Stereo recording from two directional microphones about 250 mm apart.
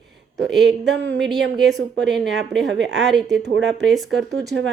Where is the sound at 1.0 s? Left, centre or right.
Right.